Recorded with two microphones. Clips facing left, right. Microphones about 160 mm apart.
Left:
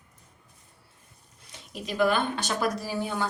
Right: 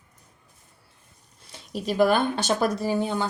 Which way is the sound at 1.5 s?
35° right (ahead or behind).